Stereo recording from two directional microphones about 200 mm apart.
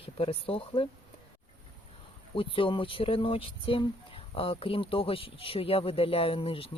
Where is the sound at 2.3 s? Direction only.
25° left (ahead or behind).